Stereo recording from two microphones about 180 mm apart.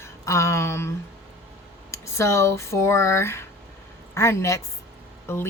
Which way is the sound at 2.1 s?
15° left (ahead or behind).